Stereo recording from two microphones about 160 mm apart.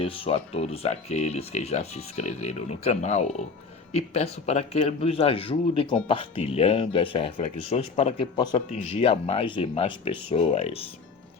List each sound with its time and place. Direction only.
0.0 s speech: 35° left (ahead or behind)